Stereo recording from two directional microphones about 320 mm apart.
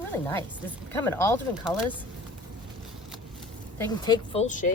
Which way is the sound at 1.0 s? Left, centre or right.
Centre.